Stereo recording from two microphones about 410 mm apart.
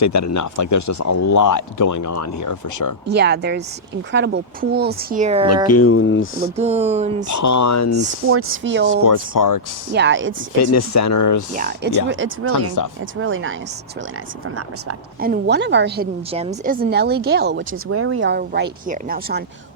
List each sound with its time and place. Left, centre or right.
0.0 s speech: left
3.1 s speech: right
5.6 s speech: left
6.6 s speech: centre
7.3 s speech: left
8.3 s speech: right
9.0 s speech: left
9.9 s speech: right
10.6 s speech: left
11.5 s speech: right
15.2 s speech: right